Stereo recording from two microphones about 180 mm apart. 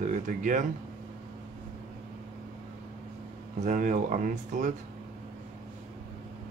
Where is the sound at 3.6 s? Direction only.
45° right (ahead or behind).